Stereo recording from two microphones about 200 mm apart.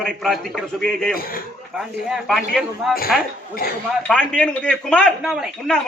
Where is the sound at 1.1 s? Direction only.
45° left (ahead or behind).